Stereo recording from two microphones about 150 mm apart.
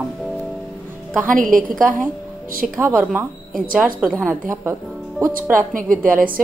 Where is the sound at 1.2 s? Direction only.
65° right (ahead or behind).